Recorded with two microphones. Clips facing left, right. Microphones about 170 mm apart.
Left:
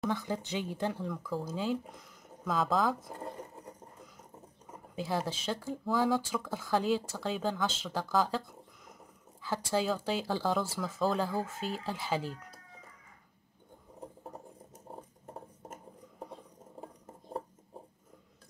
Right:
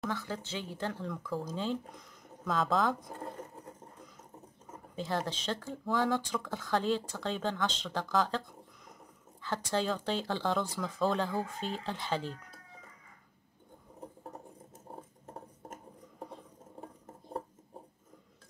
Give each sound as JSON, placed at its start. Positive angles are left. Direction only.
{"t": 0.1, "sound": "speech", "side_deg": 15}
{"t": 1.0, "sound": "speech", "side_deg": 0}
{"t": 4.9, "sound": "speech", "side_deg": 10}